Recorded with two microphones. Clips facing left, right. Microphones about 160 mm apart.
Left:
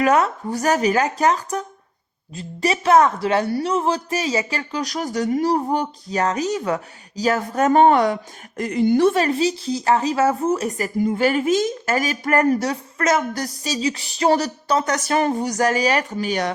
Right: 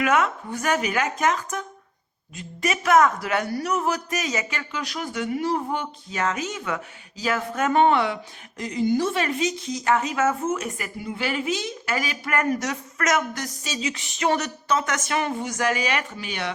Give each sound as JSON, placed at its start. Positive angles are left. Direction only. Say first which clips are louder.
{"t": 0.0, "sound": "speech", "louder": "left 4 dB", "side_deg": 35}
{"t": 9.1, "sound": "speech", "louder": "left 5 dB", "side_deg": 35}